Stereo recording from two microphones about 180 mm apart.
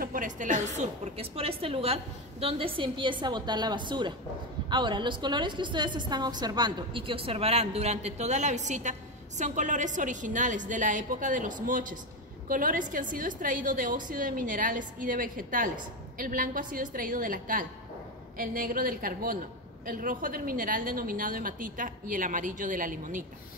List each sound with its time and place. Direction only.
0.0 s a woman's voice: 45° right (ahead or behind)